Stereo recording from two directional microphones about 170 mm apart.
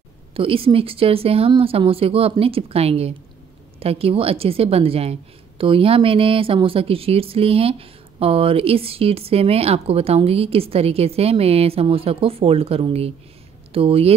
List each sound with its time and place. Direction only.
0.4 s speech: 30° right (ahead or behind)